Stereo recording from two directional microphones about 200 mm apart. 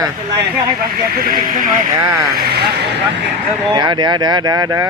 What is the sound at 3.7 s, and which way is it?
A man's voice, 20° right (ahead or behind).